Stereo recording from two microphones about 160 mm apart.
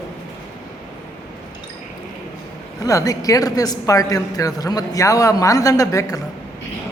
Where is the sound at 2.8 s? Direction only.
20° left (ahead or behind).